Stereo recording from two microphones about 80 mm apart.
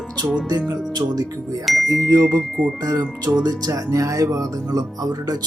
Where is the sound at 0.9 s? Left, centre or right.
Right.